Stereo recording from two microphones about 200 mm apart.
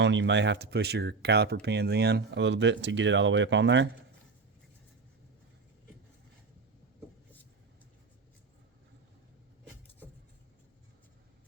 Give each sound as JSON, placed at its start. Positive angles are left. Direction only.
{"t": 0.0, "sound": "speech", "side_deg": -65}